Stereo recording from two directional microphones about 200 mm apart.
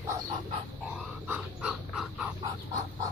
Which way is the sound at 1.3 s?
5° right (ahead or behind).